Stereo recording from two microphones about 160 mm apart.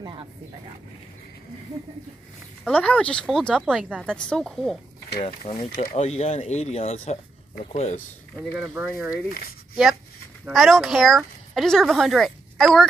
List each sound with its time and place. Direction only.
2.6 s speech: 10° left (ahead or behind)
5.7 s speech: 70° left (ahead or behind)
5.9 s speech: 45° left (ahead or behind)
8.5 s speech: 5° right (ahead or behind)
10.4 s speech: centre (ahead or behind)